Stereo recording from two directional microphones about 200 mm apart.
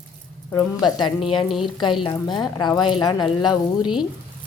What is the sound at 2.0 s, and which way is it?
A woman's voice, 20° left (ahead or behind).